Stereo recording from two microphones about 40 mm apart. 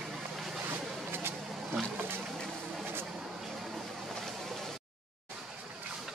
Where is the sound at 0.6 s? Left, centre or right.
Right.